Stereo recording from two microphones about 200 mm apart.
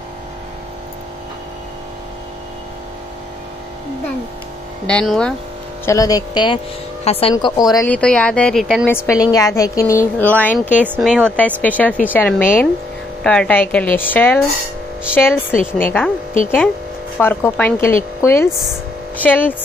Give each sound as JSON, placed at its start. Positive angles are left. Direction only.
{"t": 4.8, "sound": "speech", "side_deg": 5}
{"t": 5.9, "sound": "speech", "side_deg": 15}
{"t": 7.7, "sound": "speech", "side_deg": 10}
{"t": 8.9, "sound": "speech", "side_deg": 15}
{"t": 10.7, "sound": "speech", "side_deg": -10}
{"t": 11.6, "sound": "speech", "side_deg": 10}